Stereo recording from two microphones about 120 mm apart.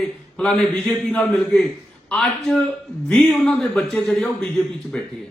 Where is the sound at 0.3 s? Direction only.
10° left (ahead or behind).